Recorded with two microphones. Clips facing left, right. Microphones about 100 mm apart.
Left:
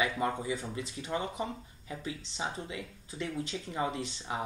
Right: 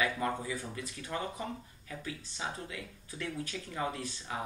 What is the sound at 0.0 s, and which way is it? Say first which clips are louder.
Speech: left 2 dB; 20° left (ahead or behind).